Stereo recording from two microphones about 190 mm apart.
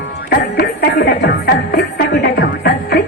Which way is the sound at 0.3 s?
55° left (ahead or behind).